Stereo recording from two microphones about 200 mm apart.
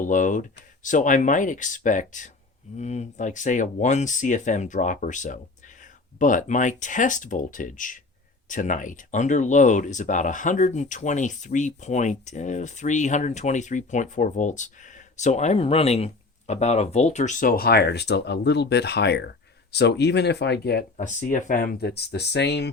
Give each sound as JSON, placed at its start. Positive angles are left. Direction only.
{"t": 0.0, "sound": "speech", "side_deg": 40}
{"t": 20.9, "sound": "speech", "side_deg": 35}